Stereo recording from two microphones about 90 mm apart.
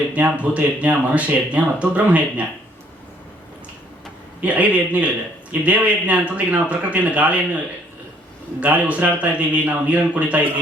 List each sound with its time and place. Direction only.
0.2 s a man's voice: 15° right (ahead or behind)
4.4 s a man's voice: 15° right (ahead or behind)
8.6 s a man's voice: 15° right (ahead or behind)